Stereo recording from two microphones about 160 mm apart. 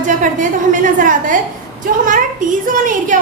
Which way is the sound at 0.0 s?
55° right (ahead or behind).